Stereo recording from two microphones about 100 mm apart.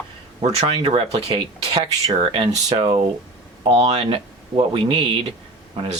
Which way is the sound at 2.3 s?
60° right (ahead or behind).